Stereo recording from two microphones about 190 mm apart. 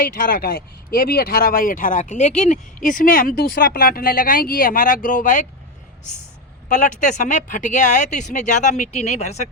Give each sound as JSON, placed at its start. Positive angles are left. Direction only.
{"t": 0.2, "sound": "speech", "side_deg": 50}
{"t": 6.7, "sound": "speech", "side_deg": 40}